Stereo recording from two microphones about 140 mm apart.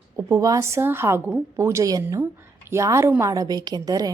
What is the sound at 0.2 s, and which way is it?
A woman's voice, 25° right (ahead or behind).